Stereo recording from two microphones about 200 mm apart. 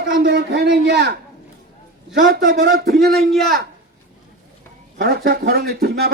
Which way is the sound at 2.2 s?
45° right (ahead or behind).